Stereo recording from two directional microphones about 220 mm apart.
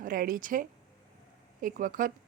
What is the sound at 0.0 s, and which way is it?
Speech, 40° right (ahead or behind).